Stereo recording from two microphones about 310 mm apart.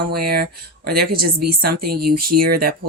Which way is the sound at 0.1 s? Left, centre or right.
Right.